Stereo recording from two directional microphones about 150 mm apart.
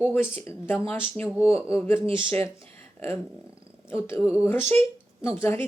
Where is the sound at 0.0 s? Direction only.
15° left (ahead or behind).